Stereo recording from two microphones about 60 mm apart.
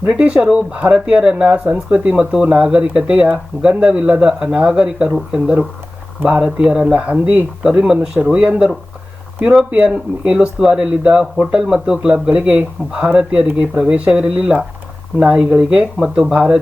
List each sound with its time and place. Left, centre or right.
0.1 s speech: centre
9.8 s speech: centre
16.0 s speech: centre